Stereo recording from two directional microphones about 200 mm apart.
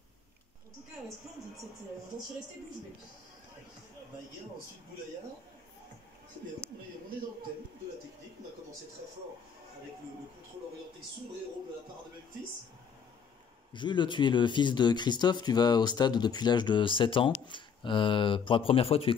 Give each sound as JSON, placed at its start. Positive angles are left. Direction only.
{"t": 13.7, "sound": "speech", "side_deg": 25}